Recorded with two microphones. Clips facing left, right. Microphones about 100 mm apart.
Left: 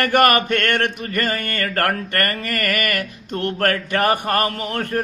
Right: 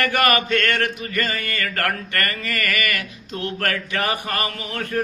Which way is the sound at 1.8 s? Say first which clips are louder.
Left 3 dB; 45° left (ahead or behind).